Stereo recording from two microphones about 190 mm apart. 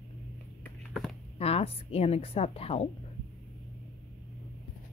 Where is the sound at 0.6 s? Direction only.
Centre (ahead or behind).